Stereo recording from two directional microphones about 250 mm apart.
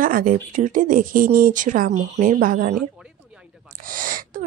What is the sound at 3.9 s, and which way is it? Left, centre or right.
Speech, right.